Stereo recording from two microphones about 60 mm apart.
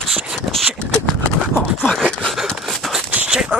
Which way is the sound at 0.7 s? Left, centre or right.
Centre.